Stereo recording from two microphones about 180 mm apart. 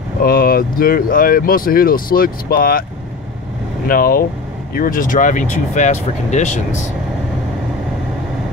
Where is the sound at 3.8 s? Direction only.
55° left (ahead or behind).